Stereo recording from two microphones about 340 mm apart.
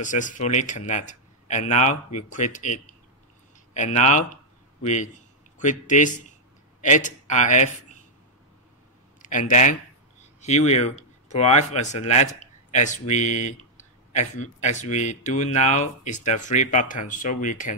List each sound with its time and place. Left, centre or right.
0.0 s speech: left
9.2 s speech: left